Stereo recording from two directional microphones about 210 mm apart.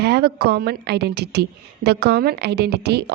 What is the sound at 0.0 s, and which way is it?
A woman's voice, 50° right (ahead or behind).